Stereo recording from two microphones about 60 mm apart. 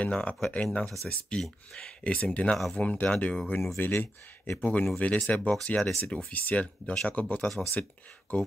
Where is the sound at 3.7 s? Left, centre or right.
Left.